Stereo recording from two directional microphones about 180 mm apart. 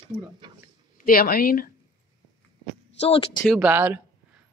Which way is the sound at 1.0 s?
55° left (ahead or behind).